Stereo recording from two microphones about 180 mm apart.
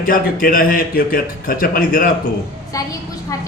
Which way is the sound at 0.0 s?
50° left (ahead or behind).